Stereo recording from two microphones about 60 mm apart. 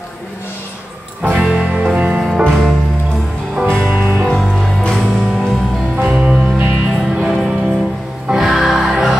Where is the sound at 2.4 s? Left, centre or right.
Centre.